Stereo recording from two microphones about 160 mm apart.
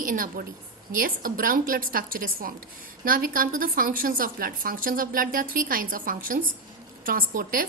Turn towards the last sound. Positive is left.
turn(degrees=-60)  # may be behind; listen again after turning